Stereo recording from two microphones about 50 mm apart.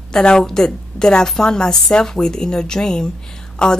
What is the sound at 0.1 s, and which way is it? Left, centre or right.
A woman's voice, centre.